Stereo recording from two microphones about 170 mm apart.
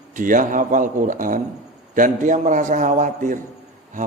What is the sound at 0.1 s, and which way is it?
A man's voice, 50° right (ahead or behind).